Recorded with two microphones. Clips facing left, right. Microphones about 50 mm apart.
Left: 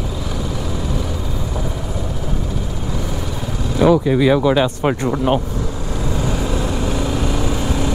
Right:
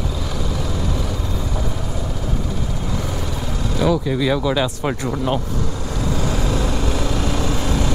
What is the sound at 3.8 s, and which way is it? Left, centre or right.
Speech, left.